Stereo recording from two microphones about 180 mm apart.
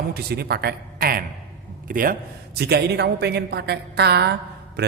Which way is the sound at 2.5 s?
65° right (ahead or behind).